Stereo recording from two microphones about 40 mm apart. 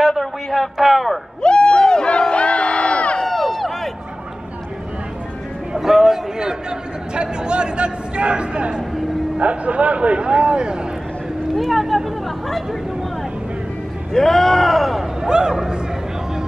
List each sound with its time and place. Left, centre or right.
0.1 s a man's voice: centre
1.4 s crowd: left
3.2 s a sound: centre
5.8 s a man's voice: centre; by 10.8 s right
11.5 s a man's voice: centre
14.1 s speech: centre
15.2 s speech: centre